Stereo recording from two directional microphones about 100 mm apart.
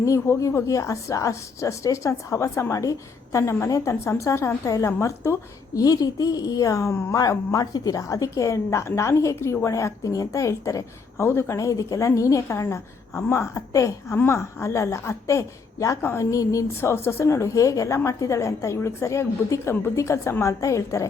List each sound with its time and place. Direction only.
0.0 s a woman's voice: 30° left (ahead or behind)
16.3 s a woman's voice: 35° left (ahead or behind)